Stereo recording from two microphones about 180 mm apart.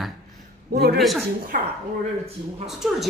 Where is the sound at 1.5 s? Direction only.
50° right (ahead or behind).